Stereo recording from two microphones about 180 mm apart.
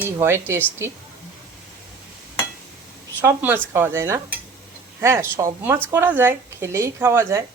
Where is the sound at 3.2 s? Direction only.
10° right (ahead or behind).